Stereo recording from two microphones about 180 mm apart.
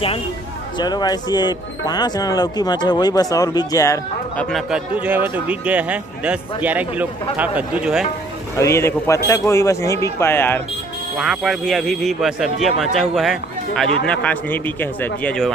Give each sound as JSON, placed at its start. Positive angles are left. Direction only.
{"t": 0.7, "sound": "speech", "side_deg": 25}
{"t": 4.5, "sound": "a man's voice", "side_deg": 0}
{"t": 8.5, "sound": "a man's voice", "side_deg": 15}
{"t": 11.1, "sound": "a man's voice", "side_deg": 0}